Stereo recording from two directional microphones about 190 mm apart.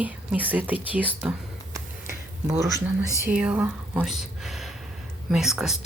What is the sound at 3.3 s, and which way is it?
Speech, 5° right (ahead or behind).